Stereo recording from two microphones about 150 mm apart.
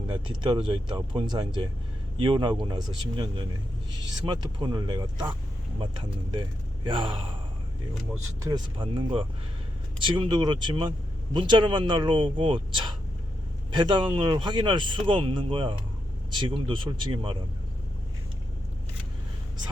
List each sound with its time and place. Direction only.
0.5 s speech: 30° right (ahead or behind)
8.4 s speech: 30° right (ahead or behind)